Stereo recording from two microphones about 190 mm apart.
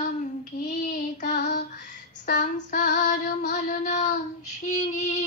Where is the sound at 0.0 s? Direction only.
45° left (ahead or behind).